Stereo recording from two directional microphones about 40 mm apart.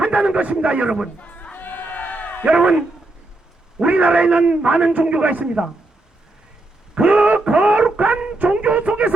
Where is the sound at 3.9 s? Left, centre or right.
Right.